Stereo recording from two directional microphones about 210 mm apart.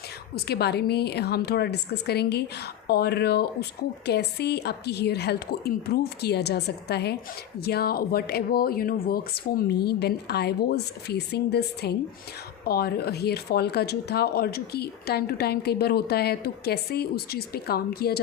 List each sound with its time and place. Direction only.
0.3 s speech: 50° left (ahead or behind)